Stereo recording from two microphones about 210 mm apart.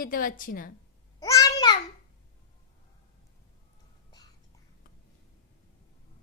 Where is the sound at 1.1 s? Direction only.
15° left (ahead or behind).